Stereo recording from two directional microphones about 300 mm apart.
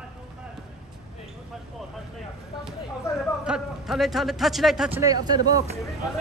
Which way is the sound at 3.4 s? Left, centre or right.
Centre.